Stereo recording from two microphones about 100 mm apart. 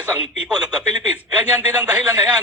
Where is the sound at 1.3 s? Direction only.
20° right (ahead or behind).